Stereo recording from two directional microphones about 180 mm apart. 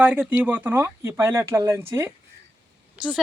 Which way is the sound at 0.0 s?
10° right (ahead or behind).